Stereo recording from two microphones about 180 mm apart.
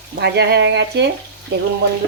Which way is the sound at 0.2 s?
70° right (ahead or behind).